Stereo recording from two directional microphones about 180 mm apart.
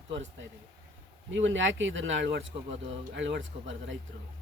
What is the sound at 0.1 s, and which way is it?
Speech, 90° right.